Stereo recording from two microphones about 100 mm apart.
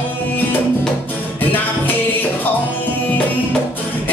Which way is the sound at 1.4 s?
20° left (ahead or behind).